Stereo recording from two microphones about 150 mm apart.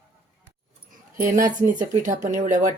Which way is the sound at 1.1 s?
65° right (ahead or behind).